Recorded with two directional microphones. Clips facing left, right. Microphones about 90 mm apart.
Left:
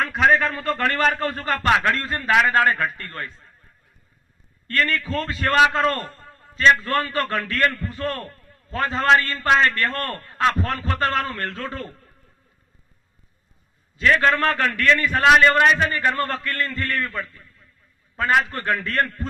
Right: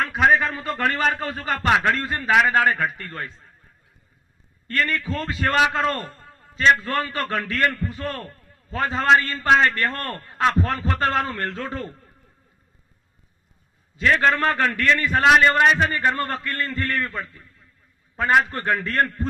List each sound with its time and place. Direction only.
0.0 s a man's voice: 5° right (ahead or behind)
4.7 s a man's voice: 20° right (ahead or behind)
14.0 s a man's voice: 25° right (ahead or behind)